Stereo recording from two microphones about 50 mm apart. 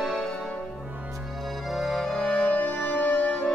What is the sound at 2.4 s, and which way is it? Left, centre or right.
Music, left.